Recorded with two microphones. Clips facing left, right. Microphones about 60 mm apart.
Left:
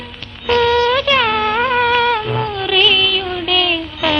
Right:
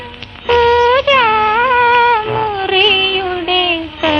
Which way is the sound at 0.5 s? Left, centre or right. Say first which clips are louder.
Right 4 dB; centre.